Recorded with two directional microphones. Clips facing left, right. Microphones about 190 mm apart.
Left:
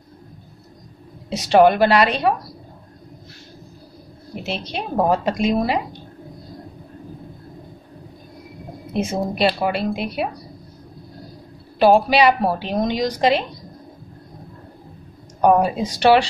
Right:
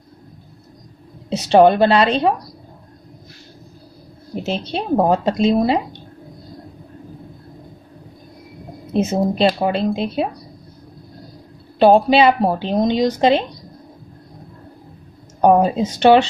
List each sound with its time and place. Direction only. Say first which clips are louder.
1.5 s a woman's voice: right 2 dB; 30° right (ahead or behind)
4.4 s a woman's voice: right 4 dB; 30° right (ahead or behind)
8.9 s a woman's voice: right 5 dB; 30° right (ahead or behind)
11.8 s a woman's voice: right 2 dB; 25° right (ahead or behind)
15.4 s a woman's voice: right 2 dB; 25° right (ahead or behind)